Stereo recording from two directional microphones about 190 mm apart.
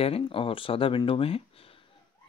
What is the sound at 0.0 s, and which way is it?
Speech, 30° left (ahead or behind).